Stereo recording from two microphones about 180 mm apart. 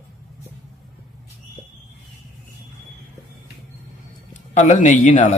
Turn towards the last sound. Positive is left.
turn(degrees=45)  # may be behind; listen again after turning